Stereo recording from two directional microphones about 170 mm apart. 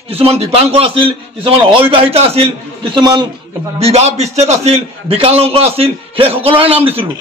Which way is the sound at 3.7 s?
40° right (ahead or behind).